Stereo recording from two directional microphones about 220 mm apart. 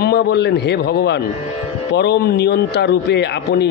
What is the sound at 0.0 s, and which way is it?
A man's voice, 50° left (ahead or behind).